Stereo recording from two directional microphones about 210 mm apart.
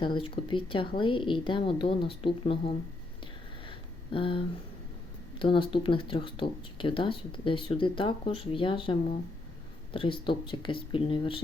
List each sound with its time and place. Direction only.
0.0 s speech: 25° left (ahead or behind)
3.7 s a sound: 25° left (ahead or behind)
5.4 s speech: 25° left (ahead or behind)